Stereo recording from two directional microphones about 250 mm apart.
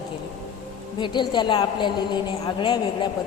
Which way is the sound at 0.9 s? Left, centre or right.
Centre.